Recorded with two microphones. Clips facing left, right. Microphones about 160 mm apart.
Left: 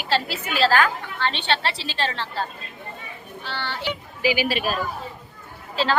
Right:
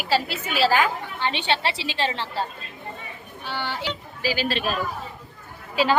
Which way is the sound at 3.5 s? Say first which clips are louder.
Right 2 dB; 10° right (ahead or behind).